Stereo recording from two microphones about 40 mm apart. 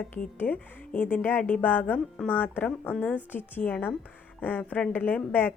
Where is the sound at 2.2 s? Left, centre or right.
Left.